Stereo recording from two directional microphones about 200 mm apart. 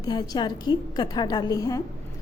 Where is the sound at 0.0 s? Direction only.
20° left (ahead or behind).